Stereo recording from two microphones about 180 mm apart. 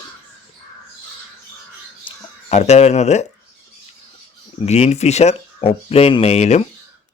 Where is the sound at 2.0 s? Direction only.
40° left (ahead or behind).